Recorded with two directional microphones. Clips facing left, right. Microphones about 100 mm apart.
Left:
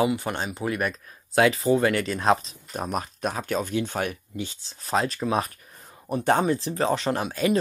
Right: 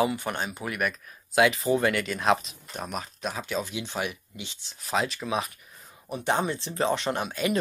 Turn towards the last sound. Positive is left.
turn(degrees=35)  # may be behind; listen again after turning